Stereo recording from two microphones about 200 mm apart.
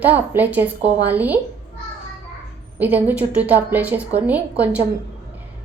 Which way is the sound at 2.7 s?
10° right (ahead or behind).